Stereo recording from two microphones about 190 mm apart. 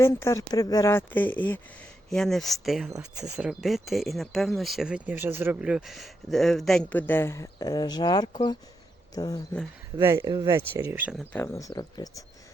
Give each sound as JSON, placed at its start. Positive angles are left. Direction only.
{"t": 0.0, "sound": "speech", "side_deg": 15}
{"t": 2.9, "sound": "speech", "side_deg": -20}
{"t": 3.3, "sound": "speech", "side_deg": -5}
{"t": 10.0, "sound": "speech", "side_deg": -15}
{"t": 11.2, "sound": "speech", "side_deg": 10}